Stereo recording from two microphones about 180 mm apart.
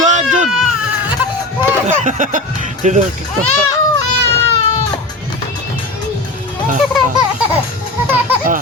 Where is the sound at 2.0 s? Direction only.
45° right (ahead or behind).